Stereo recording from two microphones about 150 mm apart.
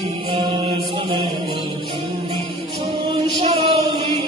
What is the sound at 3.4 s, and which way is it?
Music, 40° right (ahead or behind).